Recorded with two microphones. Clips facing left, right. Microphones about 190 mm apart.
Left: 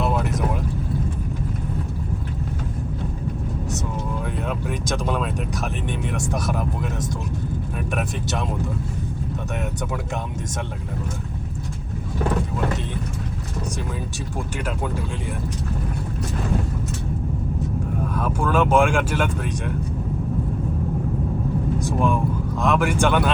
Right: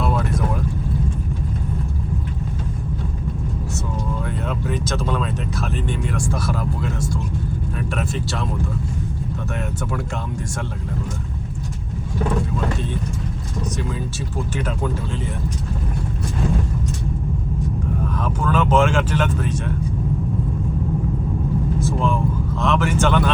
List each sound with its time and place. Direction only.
0.0 s vehicle: 20° left (ahead or behind)
4.4 s vehicle: 10° left (ahead or behind)
5.9 s speech: 20° left (ahead or behind)
18.1 s speech: 10° left (ahead or behind)
21.8 s vehicle: 15° left (ahead or behind)